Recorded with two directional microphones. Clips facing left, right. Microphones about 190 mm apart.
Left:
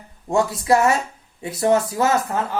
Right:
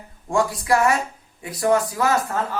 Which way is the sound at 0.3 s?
25° left (ahead or behind).